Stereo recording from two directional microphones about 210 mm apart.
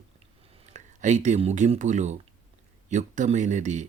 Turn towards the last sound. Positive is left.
turn(degrees=-35)  # may be behind; listen again after turning